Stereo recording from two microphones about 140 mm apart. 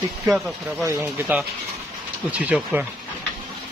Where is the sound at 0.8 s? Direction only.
15° right (ahead or behind).